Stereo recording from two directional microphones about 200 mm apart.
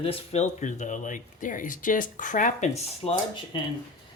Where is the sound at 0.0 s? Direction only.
30° left (ahead or behind).